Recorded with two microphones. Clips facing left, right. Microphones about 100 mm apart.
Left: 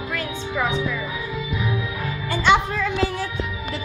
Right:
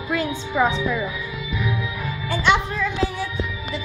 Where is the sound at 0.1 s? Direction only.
20° right (ahead or behind).